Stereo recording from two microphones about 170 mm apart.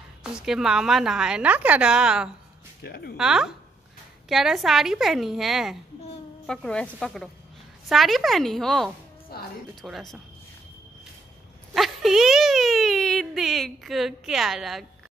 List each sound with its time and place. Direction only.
0.2 s a woman's voice: 5° right (ahead or behind)
2.8 s speech: 70° left (ahead or behind)
3.2 s a woman's voice: 5° right (ahead or behind)
9.3 s music: 65° left (ahead or behind)
9.8 s a woman's voice: centre (ahead or behind)
11.7 s a child's voice: centre (ahead or behind)